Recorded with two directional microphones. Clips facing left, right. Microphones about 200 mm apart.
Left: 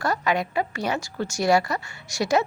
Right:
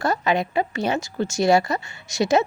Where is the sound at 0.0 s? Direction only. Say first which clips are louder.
Right 3 dB; 25° right (ahead or behind).